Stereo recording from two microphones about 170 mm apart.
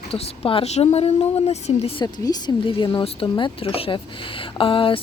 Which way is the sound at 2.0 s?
20° left (ahead or behind).